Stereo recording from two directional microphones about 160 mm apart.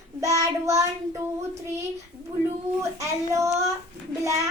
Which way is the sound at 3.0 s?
20° right (ahead or behind).